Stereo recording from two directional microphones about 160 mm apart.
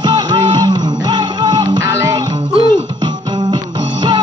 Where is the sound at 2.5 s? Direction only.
30° right (ahead or behind).